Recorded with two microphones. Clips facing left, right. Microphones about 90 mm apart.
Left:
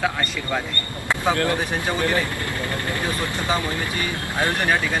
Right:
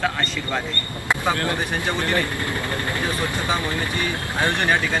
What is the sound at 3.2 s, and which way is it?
Speech, 20° right (ahead or behind).